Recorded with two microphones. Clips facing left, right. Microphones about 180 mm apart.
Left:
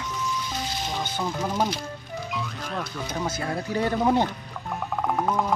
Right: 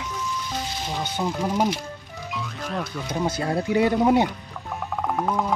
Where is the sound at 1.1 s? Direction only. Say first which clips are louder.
Right 3 dB; 15° right (ahead or behind).